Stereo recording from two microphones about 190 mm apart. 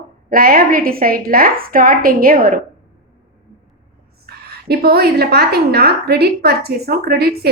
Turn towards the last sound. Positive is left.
turn(degrees=-55)  # may be behind; listen again after turning